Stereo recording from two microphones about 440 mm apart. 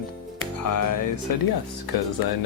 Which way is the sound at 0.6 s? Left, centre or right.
Left.